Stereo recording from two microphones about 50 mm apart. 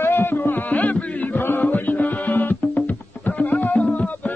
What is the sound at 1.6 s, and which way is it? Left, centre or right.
Music, left.